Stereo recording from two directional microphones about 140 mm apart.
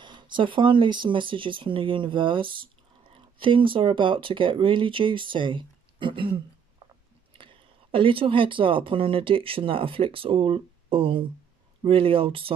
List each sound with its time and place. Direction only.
0.0 s speech: 35° right (ahead or behind)